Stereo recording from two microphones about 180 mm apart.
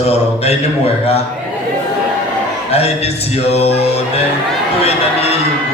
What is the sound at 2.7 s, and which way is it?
Speech, 35° left (ahead or behind).